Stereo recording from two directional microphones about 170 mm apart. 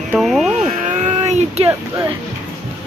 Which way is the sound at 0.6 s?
40° right (ahead or behind).